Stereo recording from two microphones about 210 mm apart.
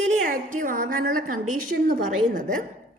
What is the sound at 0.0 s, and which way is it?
A woman's voice, 35° right (ahead or behind).